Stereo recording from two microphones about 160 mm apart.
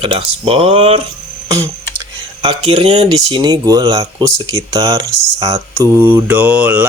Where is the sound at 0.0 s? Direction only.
35° right (ahead or behind).